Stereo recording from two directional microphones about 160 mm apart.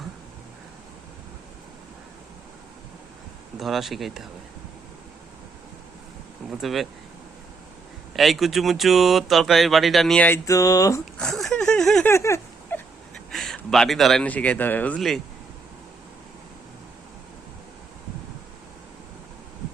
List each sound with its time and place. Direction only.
3.6 s speech: centre (ahead or behind)
6.5 s speech: centre (ahead or behind)
8.1 s speech: centre (ahead or behind); by 11.0 s 20° left (ahead or behind)
11.2 s a sound: centre (ahead or behind)
12.1 s a sound: 15° left (ahead or behind)
13.3 s speech: centre (ahead or behind)